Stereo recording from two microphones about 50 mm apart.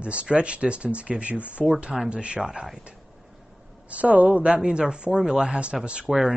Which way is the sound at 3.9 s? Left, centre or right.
Right.